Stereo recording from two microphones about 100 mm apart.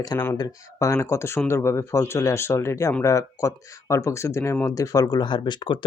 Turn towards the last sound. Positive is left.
turn(degrees=50)  # may be behind; listen again after turning